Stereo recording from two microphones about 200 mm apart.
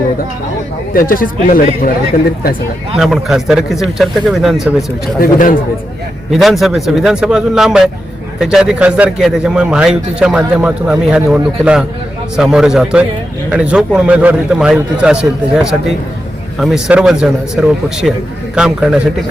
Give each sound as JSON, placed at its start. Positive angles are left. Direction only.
{"t": 0.9, "sound": "speech", "side_deg": 45}
{"t": 3.0, "sound": "a man's voice", "side_deg": 0}
{"t": 5.2, "sound": "speech", "side_deg": 45}
{"t": 6.3, "sound": "a man's voice", "side_deg": 0}